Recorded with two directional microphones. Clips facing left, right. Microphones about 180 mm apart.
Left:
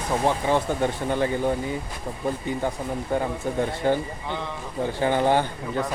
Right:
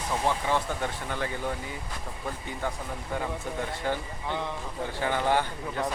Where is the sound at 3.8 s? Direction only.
30° left (ahead or behind).